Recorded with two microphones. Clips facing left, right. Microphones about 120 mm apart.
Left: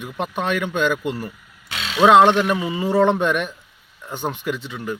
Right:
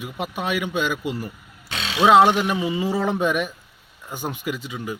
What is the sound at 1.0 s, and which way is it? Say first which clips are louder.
Speech: left 2 dB; 45° left (ahead or behind).